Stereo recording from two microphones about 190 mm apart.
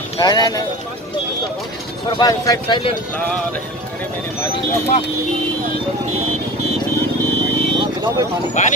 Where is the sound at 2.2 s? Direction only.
20° left (ahead or behind).